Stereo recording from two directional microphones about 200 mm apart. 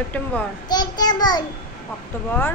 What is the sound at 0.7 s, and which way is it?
Speech, 20° left (ahead or behind).